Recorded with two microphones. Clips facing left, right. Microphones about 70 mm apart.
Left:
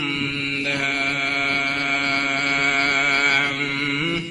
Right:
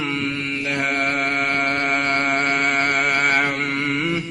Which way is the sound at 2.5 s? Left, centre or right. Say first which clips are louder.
Right 1 dB; centre.